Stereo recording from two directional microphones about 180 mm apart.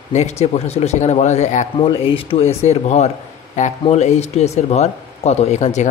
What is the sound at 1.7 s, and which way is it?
Speech, 30° left (ahead or behind).